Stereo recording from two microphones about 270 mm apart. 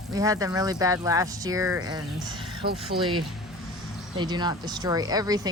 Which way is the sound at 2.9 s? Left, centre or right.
Right.